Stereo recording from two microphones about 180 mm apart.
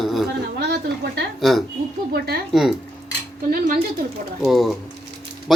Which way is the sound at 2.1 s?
60° right (ahead or behind).